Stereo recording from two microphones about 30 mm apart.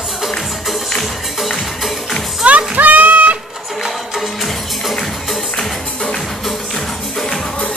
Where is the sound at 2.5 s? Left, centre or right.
Right.